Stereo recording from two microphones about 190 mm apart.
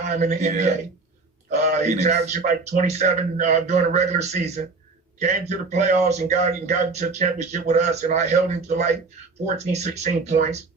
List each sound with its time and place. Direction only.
0.0 s speech: 40° right (ahead or behind)